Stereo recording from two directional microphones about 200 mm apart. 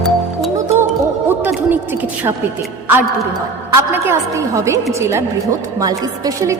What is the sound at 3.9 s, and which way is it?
A woman's voice, 15° right (ahead or behind).